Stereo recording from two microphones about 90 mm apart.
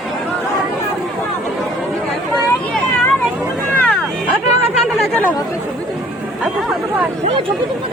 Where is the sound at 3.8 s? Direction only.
15° left (ahead or behind).